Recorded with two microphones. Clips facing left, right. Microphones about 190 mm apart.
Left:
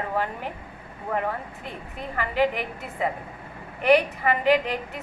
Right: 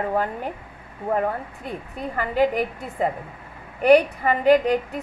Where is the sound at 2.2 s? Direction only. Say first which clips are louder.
Right 3 dB; 40° right (ahead or behind).